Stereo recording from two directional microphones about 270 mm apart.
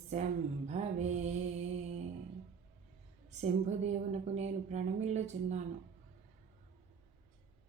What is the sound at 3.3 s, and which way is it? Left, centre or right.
A woman's voice, right.